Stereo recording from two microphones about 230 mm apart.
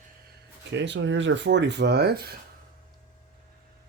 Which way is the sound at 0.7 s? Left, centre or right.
Right.